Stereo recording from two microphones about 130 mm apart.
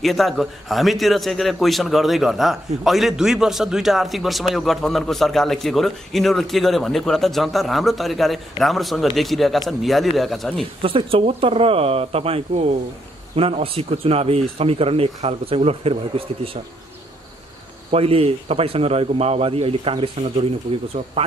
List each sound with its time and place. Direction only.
0.0 s speech: centre (ahead or behind)
10.8 s speech: 45° right (ahead or behind)
17.9 s speech: 50° right (ahead or behind)